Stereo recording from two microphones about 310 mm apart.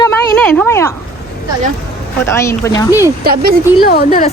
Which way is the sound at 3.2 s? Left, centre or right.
Right.